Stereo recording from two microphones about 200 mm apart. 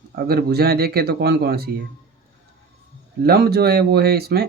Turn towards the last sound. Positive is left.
turn(degrees=-50)  # may be behind; listen again after turning